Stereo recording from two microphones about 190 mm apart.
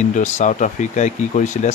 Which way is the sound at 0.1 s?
40° left (ahead or behind).